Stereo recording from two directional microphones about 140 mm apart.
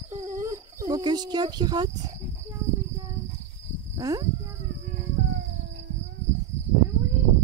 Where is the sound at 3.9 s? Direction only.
25° right (ahead or behind).